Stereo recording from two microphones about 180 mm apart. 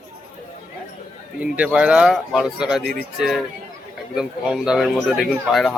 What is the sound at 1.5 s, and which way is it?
Speech, 5° right (ahead or behind).